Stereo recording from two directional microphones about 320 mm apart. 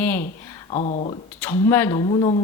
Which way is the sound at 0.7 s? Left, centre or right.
Left.